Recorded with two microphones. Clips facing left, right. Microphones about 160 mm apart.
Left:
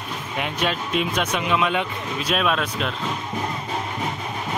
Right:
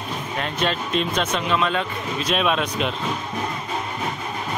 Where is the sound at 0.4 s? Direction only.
10° left (ahead or behind).